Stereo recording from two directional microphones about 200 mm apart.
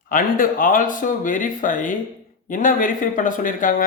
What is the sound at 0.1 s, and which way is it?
A man's voice, 45° left (ahead or behind).